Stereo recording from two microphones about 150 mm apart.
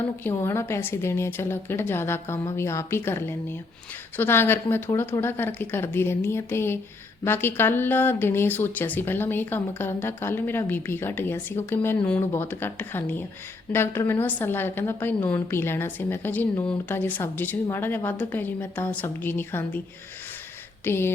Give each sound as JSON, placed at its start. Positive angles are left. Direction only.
{"t": 0.3, "sound": "a woman's voice", "side_deg": 15}
{"t": 20.8, "sound": "a woman's voice", "side_deg": 15}